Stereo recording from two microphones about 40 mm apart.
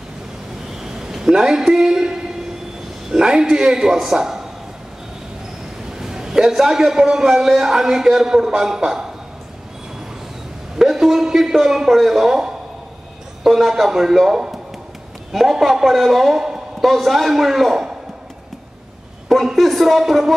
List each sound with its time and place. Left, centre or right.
0.8 s a sound: centre
1.3 s a man's voice: centre
5.9 s a man's voice: centre
10.8 s a man's voice: centre
15.6 s a man's voice: centre
16.3 s a sound: centre
16.8 s a man's voice: centre
19.4 s a man's voice: centre